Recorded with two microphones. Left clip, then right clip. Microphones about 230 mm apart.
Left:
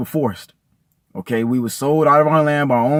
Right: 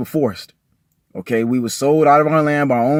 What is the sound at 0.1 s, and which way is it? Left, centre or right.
Speech, left.